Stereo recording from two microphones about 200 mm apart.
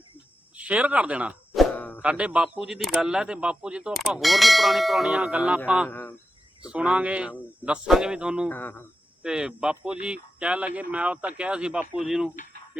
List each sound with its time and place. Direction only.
0.5 s speech: 5° right (ahead or behind)
1.7 s a sound: 10° left (ahead or behind)
2.0 s speech: 5° right (ahead or behind)
5.9 s speech: 10° left (ahead or behind)
6.7 s speech: 5° right (ahead or behind)
8.4 s speech: 10° left (ahead or behind)
9.2 s speech: 5° right (ahead or behind)